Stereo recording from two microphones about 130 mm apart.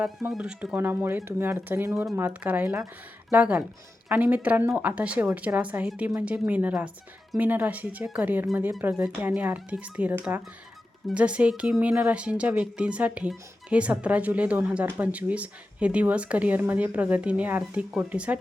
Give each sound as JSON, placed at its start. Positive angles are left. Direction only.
{"t": 0.3, "sound": "speech", "side_deg": -5}